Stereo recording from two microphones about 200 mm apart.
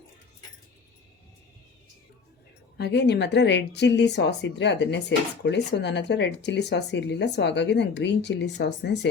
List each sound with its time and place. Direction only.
2.7 s a woman's voice: 55° left (ahead or behind)